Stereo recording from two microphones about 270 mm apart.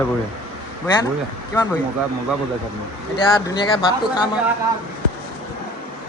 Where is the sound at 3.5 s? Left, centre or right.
Centre.